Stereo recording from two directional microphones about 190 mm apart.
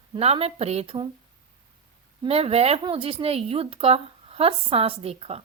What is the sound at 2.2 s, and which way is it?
A woman's voice, 30° right (ahead or behind).